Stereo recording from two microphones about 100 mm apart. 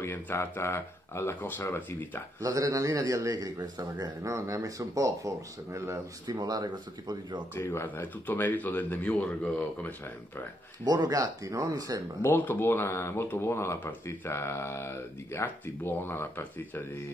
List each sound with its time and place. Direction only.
0.0 s speech: 25° left (ahead or behind)
2.4 s a man's voice: 35° right (ahead or behind)
6.2 s speech: 45° right (ahead or behind)
7.5 s speech: 25° left (ahead or behind)
10.8 s a man's voice: 45° right (ahead or behind)
12.2 s speech: 20° left (ahead or behind)